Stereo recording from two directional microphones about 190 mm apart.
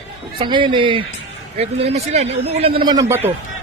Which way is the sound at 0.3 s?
25° right (ahead or behind).